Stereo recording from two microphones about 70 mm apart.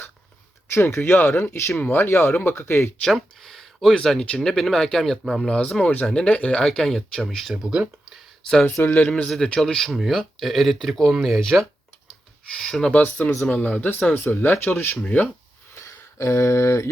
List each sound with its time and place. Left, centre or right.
0.7 s speech: left
3.0 s speech: centre
5.5 s speech: centre
6.7 s speech: centre
8.7 s speech: left
9.3 s speech: centre
12.9 s speech: left
15.7 s a sound: left